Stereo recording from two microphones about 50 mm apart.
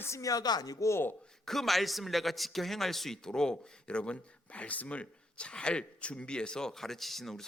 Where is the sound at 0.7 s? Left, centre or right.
Left.